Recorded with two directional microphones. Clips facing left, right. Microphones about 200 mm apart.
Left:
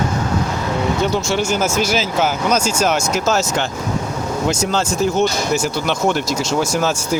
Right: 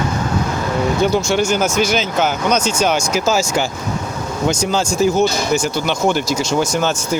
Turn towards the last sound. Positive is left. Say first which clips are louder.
# right 1 dB
turn(degrees=0)  # may be behind; listen again after turning